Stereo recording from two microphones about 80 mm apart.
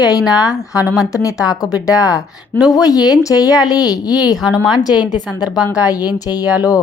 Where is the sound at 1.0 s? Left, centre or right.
Left.